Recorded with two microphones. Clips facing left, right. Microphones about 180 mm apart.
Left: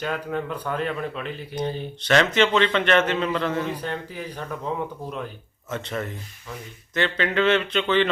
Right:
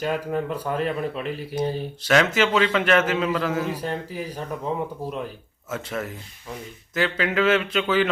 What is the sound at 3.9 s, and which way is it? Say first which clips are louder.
Speech: right 2 dB; 40° right (ahead or behind).